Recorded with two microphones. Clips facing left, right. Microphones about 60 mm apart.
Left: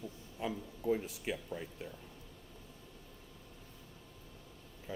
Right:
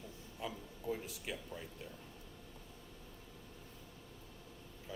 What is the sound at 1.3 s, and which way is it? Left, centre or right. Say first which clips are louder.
Speech: left 6 dB; left.